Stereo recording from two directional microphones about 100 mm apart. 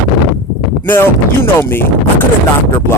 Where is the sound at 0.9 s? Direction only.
25° left (ahead or behind).